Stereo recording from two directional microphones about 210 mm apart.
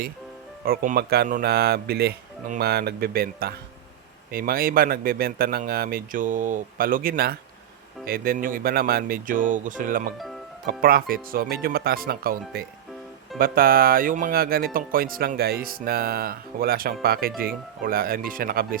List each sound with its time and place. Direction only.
0.6 s speech: 45° right (ahead or behind)